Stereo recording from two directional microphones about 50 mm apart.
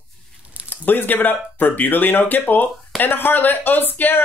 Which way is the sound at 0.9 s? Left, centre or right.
Left.